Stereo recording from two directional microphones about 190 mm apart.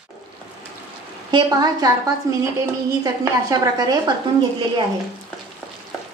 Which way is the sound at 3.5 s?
20° right (ahead or behind).